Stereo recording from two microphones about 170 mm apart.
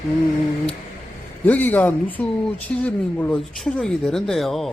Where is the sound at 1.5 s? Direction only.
10° left (ahead or behind).